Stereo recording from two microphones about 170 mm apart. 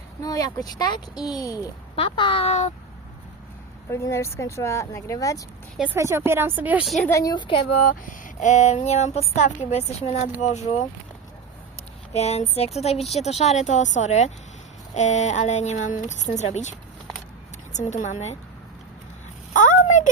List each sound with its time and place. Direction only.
0.2 s a child's voice: 20° left (ahead or behind); by 2.7 s 40° left (ahead or behind)
3.8 s speech: 15° left (ahead or behind)
5.7 s a woman's voice: 10° right (ahead or behind)
7.1 s speech: 20° left (ahead or behind)
8.0 s a child's voice: 50° left (ahead or behind)
12.1 s a child's voice: 40° left (ahead or behind)
17.7 s speech: 45° left (ahead or behind)
19.5 s a sound: 50° left (ahead or behind)